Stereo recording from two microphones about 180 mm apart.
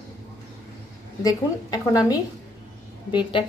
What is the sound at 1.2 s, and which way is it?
Speech, 20° left (ahead or behind).